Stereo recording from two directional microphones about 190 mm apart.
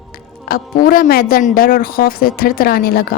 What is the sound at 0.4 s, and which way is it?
A woman's voice, 50° left (ahead or behind).